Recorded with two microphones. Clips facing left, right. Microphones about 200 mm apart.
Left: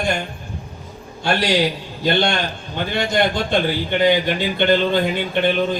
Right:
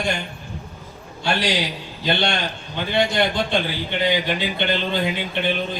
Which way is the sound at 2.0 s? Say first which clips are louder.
Left 4 dB; 50° left (ahead or behind).